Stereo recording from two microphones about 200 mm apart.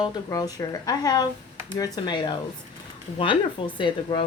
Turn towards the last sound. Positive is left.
turn(degrees=25)  # may be behind; listen again after turning